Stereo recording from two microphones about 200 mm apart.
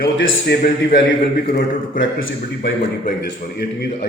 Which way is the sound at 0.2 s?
50° left (ahead or behind).